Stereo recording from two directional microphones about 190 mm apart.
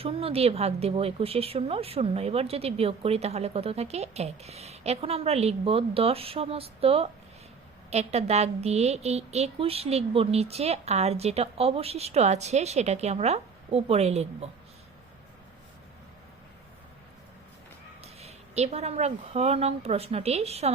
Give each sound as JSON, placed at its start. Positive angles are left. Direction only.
{"t": 0.0, "sound": "a woman's voice", "side_deg": -30}
{"t": 18.0, "sound": "a woman's voice", "side_deg": -35}